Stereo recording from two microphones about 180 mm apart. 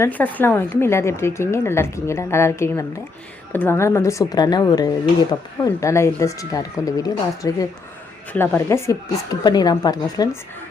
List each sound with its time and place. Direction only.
0.0 s a woman's voice: 10° left (ahead or behind)